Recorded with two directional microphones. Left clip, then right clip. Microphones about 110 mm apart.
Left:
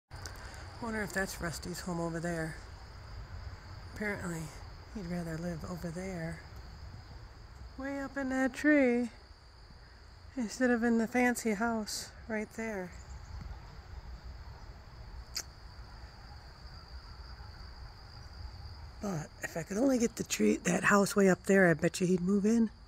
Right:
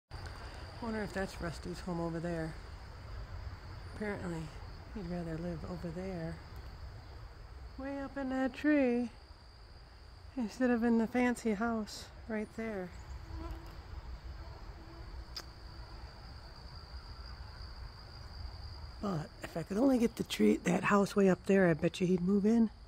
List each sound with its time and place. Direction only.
0.2 s speech: 30° left (ahead or behind)
4.0 s speech: 30° left (ahead or behind)
7.8 s speech: 30° left (ahead or behind)
10.3 s speech: 10° left (ahead or behind)
18.9 s speech: 5° right (ahead or behind)
20.8 s speech: 25° left (ahead or behind)